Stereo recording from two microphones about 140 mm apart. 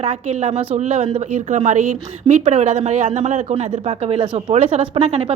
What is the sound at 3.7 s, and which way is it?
A woman's voice, 45° right (ahead or behind).